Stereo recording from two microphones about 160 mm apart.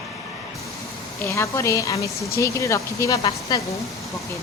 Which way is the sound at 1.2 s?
15° left (ahead or behind).